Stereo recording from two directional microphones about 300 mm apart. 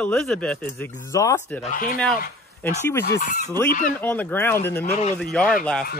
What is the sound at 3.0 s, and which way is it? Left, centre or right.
Chicken, left.